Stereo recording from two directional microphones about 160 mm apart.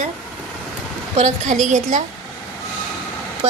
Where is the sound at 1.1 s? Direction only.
50° right (ahead or behind).